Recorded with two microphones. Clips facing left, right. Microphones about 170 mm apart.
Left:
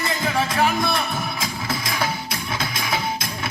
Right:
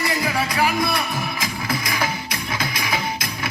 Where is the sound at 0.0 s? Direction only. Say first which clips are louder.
Even; 25° left (ahead or behind).